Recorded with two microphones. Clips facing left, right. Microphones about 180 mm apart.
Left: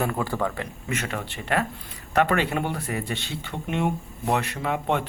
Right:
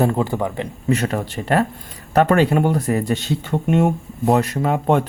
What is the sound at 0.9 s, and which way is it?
Speech, 35° right (ahead or behind).